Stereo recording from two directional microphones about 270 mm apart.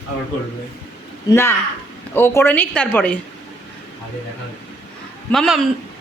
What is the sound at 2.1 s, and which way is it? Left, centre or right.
A woman's voice, centre.